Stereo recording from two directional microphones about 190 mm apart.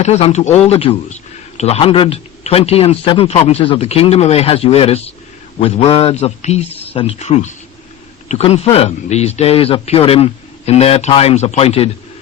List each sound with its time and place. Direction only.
0.0 s a man's voice: 35° left (ahead or behind)